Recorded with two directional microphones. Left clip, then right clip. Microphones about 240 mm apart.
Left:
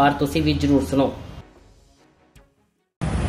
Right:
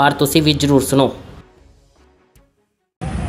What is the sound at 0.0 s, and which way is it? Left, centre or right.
Speech, right.